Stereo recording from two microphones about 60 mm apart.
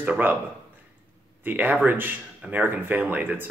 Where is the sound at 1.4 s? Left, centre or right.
Right.